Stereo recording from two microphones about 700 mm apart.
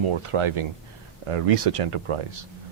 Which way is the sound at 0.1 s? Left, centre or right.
Right.